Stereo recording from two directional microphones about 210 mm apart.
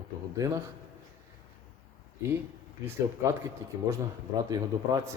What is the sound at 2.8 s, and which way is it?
A man's voice, 15° right (ahead or behind).